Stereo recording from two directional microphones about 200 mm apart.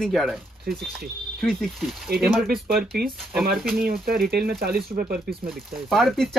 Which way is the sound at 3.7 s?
50° right (ahead or behind).